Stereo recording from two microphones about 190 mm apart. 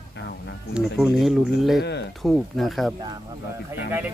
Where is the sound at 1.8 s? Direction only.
65° left (ahead or behind).